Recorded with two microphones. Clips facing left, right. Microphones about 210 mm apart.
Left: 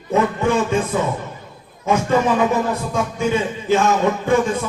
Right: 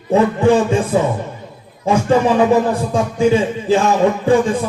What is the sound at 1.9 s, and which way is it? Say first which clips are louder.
Music: right 3 dB; 30° right (ahead or behind).